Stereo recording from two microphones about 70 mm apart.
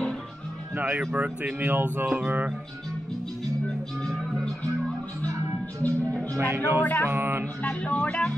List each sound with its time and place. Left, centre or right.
0.7 s speech: right
5.3 s music: right
6.3 s speech: right
6.8 s speech: left
7.1 s speech: right
7.8 s speech: left